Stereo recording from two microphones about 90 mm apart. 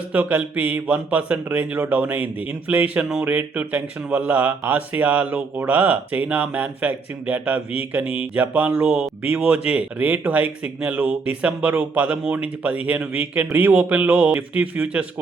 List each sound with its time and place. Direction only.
0.1 s speech: 20° right (ahead or behind)